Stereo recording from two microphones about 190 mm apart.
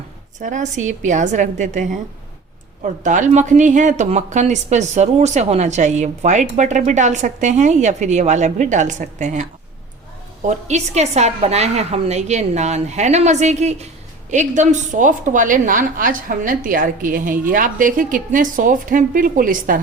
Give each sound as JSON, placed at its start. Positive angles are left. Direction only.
{"t": 0.3, "sound": "a woman's voice", "side_deg": -40}